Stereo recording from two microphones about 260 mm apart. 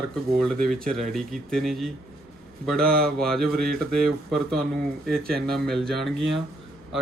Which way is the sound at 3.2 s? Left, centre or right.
Centre.